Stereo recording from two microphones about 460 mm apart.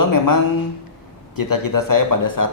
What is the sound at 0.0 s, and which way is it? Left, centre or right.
Speech, left.